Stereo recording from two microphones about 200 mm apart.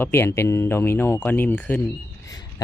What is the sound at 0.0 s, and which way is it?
Speech, 10° left (ahead or behind).